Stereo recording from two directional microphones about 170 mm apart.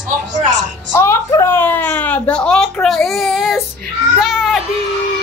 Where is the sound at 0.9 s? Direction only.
15° left (ahead or behind); by 4.6 s 5° right (ahead or behind).